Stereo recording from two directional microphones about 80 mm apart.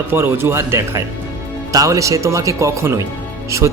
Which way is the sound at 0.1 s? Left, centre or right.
Right.